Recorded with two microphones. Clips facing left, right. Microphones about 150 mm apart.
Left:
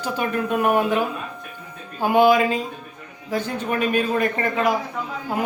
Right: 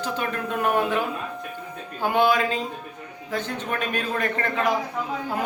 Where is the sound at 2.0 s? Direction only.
10° left (ahead or behind).